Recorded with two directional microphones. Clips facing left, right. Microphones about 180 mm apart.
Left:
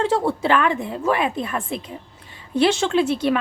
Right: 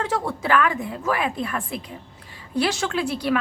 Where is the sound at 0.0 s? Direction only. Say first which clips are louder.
Left 5 dB; 30° left (ahead or behind).